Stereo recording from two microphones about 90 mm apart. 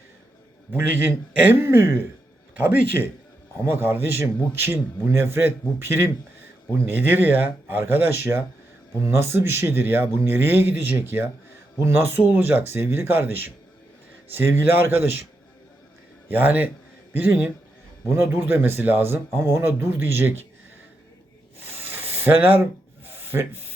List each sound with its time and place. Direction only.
0.7 s a man's voice: 20° right (ahead or behind)
2.6 s a man's voice: 15° right (ahead or behind)
16.3 s a man's voice: 20° right (ahead or behind)
21.6 s snake: 20° right (ahead or behind)
23.0 s rub: 25° right (ahead or behind)